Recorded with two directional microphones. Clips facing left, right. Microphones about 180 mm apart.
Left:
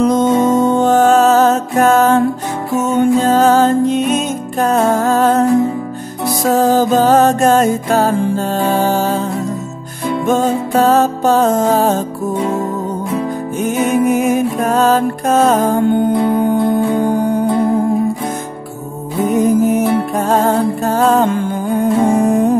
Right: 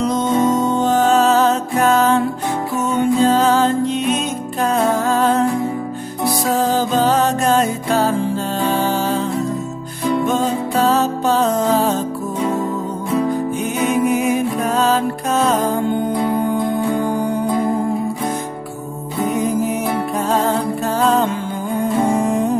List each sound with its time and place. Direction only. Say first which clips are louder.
0.0 s music: left 5 dB; 50° left (ahead or behind)
6.5 s music: left 7 dB; 45° left (ahead or behind)
10.2 s music: left 4 dB; 45° left (ahead or behind)
13.8 s music: left 2 dB; 45° left (ahead or behind)
19.6 s music: left 6 dB; 50° left (ahead or behind)